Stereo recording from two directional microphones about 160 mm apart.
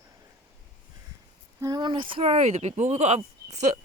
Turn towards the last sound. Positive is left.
turn(degrees=-45)  # may be behind; listen again after turning